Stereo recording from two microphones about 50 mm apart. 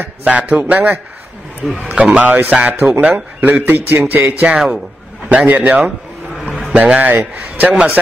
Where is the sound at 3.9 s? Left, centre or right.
Right.